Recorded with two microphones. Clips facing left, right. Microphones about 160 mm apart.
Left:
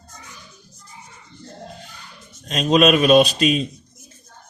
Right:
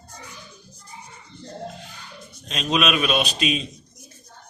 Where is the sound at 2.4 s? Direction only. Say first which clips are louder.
Left 7 dB; 45° left (ahead or behind).